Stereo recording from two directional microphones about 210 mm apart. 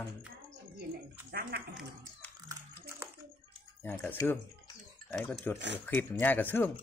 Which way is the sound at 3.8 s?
10° left (ahead or behind).